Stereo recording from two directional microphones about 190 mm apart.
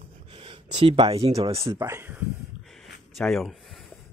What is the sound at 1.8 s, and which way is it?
Speech, 15° right (ahead or behind).